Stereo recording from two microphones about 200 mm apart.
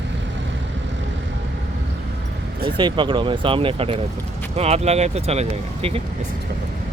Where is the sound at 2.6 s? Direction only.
25° right (ahead or behind).